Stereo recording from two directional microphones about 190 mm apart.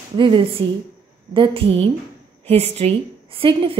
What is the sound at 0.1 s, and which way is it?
A woman's voice, 25° right (ahead or behind).